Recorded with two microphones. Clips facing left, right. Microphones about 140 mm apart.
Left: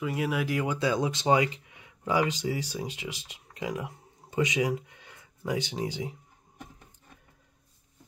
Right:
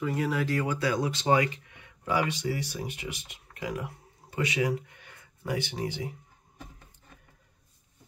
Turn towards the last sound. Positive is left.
turn(degrees=20)  # may be behind; listen again after turning